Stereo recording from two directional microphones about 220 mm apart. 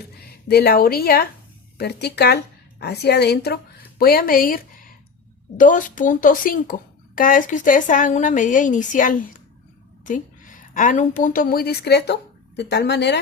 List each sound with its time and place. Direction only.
0.4 s a woman's voice: 45° left (ahead or behind)
10.8 s a woman's voice: 35° left (ahead or behind)